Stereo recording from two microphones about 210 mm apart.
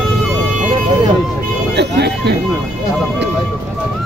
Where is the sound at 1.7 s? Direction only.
55° right (ahead or behind).